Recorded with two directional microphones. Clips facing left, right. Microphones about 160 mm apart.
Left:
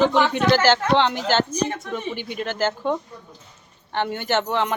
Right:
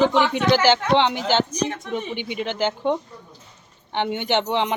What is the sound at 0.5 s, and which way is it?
Speech, 15° right (ahead or behind).